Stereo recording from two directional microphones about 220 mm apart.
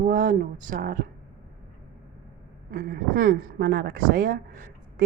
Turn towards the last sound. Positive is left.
turn(degrees=-40)  # may be behind; listen again after turning